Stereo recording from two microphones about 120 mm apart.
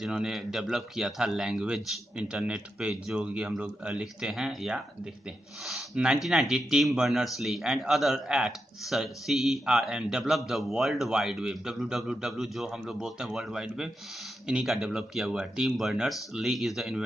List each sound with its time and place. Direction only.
0.0 s a man's voice: 5° right (ahead or behind)